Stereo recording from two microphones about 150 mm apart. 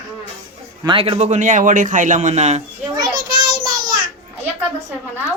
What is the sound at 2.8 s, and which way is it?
Child singing, 30° right (ahead or behind).